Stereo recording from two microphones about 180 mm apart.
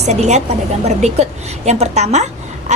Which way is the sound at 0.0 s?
40° right (ahead or behind).